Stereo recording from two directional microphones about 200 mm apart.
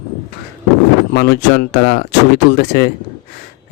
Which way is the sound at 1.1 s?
50° left (ahead or behind).